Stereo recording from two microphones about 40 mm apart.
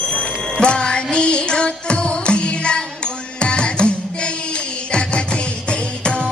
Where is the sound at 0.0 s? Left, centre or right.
Left.